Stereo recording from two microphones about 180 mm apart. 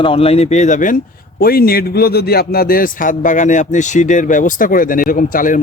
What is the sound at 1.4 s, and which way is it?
A man's voice, 55° left (ahead or behind).